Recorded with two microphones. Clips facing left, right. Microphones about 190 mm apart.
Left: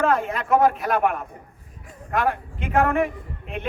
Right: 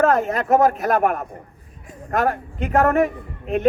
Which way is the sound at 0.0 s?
45° right (ahead or behind).